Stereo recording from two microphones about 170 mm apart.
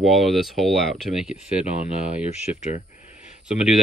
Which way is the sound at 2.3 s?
40° left (ahead or behind).